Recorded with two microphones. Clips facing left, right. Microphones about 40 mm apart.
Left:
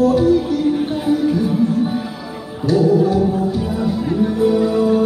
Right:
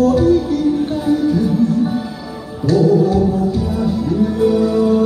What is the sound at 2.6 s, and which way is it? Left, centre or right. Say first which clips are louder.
Music: right 1 dB; left.